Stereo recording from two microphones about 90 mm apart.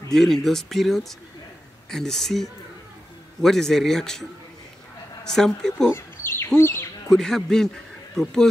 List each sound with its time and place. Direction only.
0.1 s speech: centre (ahead or behind)
5.9 s bird: 30° left (ahead or behind)
6.6 s speech: 30° left (ahead or behind)
7.1 s a man's voice: 5° left (ahead or behind)